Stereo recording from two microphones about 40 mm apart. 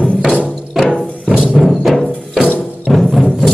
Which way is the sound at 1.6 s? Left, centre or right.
Centre.